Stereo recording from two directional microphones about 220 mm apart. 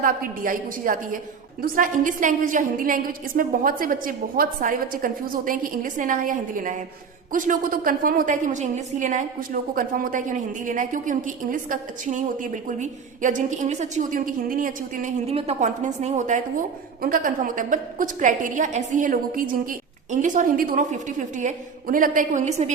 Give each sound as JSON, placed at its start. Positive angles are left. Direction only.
{"t": 0.0, "sound": "a woman's voice", "side_deg": -40}